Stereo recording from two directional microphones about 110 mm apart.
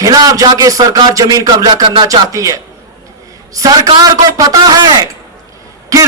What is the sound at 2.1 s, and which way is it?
A man's voice, 30° right (ahead or behind).